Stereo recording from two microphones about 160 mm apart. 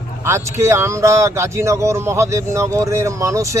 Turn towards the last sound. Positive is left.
turn(degrees=-20)  # may be behind; listen again after turning